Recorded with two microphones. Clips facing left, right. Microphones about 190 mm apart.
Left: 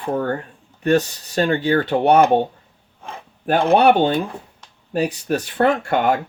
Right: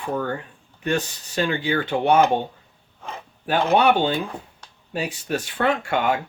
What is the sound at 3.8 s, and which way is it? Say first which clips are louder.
Speech: left 4 dB; 55° left (ahead or behind).